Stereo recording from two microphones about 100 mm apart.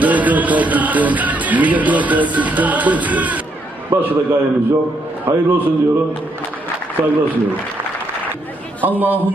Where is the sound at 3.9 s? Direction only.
25° right (ahead or behind).